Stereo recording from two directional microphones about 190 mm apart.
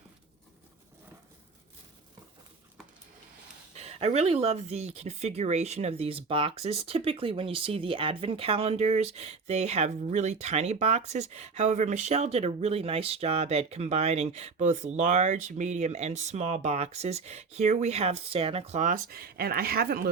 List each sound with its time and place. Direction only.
3.8 s speech: 35° right (ahead or behind); by 20.1 s 55° right (ahead or behind)